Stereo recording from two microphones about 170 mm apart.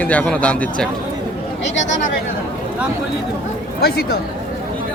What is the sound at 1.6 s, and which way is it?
Speech, 90° left.